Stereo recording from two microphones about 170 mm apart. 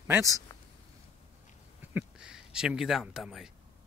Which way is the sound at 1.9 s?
5° right (ahead or behind).